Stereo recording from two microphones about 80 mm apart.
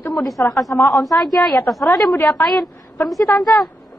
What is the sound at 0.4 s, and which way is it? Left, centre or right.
Speech, left.